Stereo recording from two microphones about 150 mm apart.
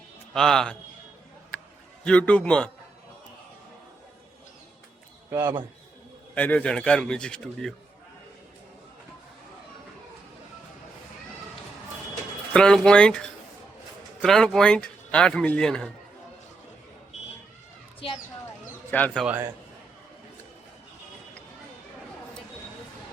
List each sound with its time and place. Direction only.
0.3 s speech: 5° left (ahead or behind)
2.0 s speech: 10° left (ahead or behind)
5.3 s a man's voice: 15° right (ahead or behind)
6.3 s speech: 10° left (ahead or behind)
12.5 s speech: 5° left (ahead or behind)
18.9 s speech: 10° left (ahead or behind)